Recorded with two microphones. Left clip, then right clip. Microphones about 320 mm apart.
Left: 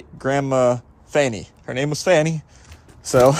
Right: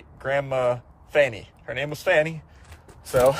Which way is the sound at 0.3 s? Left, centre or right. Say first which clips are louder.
Left 5 dB; centre.